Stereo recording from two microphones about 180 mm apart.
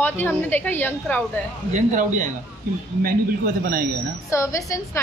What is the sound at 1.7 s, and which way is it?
Speech, 40° right (ahead or behind).